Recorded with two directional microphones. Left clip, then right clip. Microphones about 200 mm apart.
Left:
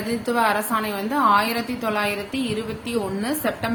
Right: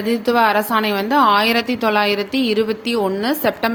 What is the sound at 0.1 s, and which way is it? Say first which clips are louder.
A woman's voice: right 6 dB; 40° right (ahead or behind).